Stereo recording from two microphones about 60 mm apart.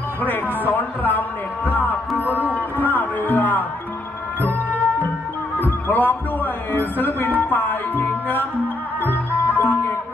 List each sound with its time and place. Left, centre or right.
0.2 s speech: left
2.5 s music: left